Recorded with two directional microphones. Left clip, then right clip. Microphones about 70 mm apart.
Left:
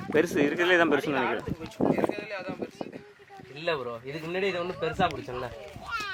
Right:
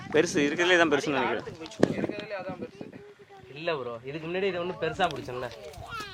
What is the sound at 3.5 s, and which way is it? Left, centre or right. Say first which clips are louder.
Speech: left 1 dB; centre.